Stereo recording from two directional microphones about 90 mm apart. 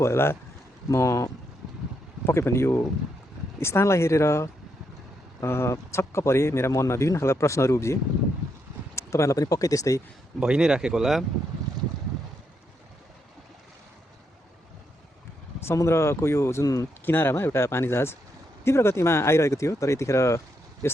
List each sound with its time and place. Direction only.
0.0 s a man's voice: 30° left (ahead or behind)
9.0 s a man's voice: 35° left (ahead or behind)
10.4 s speech: 10° right (ahead or behind)
15.6 s a man's voice: 30° left (ahead or behind)
17.1 s a man's voice: 25° left (ahead or behind)